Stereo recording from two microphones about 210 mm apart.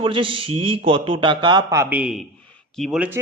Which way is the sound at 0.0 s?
25° right (ahead or behind).